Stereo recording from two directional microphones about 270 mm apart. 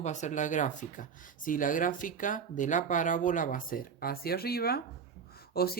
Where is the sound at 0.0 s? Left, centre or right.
Left.